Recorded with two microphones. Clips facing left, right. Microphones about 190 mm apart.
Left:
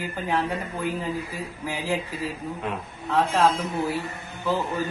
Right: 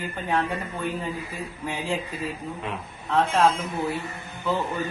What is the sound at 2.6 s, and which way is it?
Speech, 5° left (ahead or behind).